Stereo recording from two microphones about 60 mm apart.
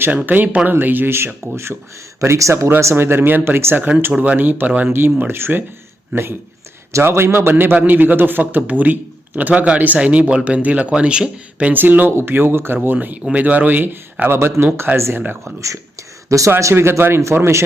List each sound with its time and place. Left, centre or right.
0.3 s a man's voice: right
2.9 s a man's voice: right
4.9 s a man's voice: right; by 11.7 s centre
11.7 s a man's voice: right
14.3 s speech: right
15.6 s a sound: right
16.5 s speech: right
16.7 s speech: right